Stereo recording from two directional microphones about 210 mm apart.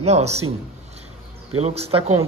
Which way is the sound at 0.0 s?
30° right (ahead or behind).